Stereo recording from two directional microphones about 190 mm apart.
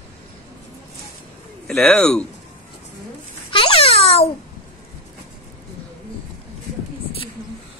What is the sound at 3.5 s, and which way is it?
Babbling, 30° left (ahead or behind).